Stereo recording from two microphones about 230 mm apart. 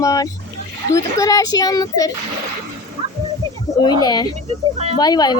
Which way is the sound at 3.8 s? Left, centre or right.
Centre.